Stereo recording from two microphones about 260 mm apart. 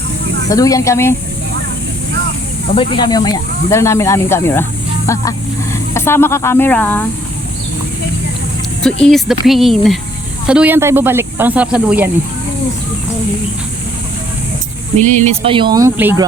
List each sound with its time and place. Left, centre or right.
0.4 s speech: centre
2.7 s speech: centre
8.8 s speech: centre
14.9 s speech: right; by 16.2 s centre